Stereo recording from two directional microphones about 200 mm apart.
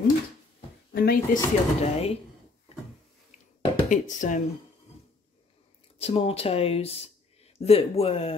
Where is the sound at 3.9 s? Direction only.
40° left (ahead or behind).